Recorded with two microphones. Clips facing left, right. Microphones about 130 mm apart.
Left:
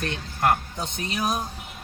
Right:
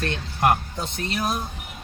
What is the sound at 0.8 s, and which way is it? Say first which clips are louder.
Speech: right 1 dB; 20° left (ahead or behind).